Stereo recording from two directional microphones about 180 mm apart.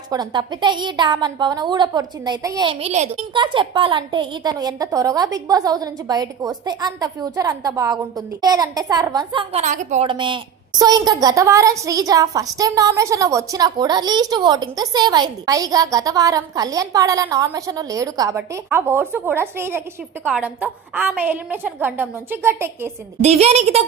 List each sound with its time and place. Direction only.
0.1 s a woman's voice: 25° right (ahead or behind)
2.6 s a woman's voice: 35° right (ahead or behind)
3.3 s a woman's voice: 25° right (ahead or behind); by 10.1 s 40° right (ahead or behind)
10.1 s a woman's voice: 25° right (ahead or behind)
23.2 s a woman's voice: 35° right (ahead or behind)